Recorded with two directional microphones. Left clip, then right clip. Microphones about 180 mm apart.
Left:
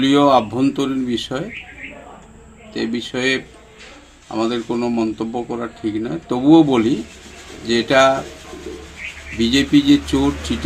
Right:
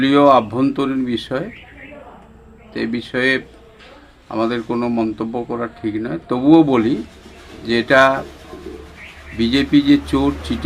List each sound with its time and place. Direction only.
0.0 s speech: centre (ahead or behind)
3.2 s speech: 5° right (ahead or behind)
9.4 s speech: 5° right (ahead or behind)